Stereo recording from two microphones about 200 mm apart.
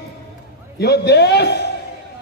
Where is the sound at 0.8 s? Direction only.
55° left (ahead or behind).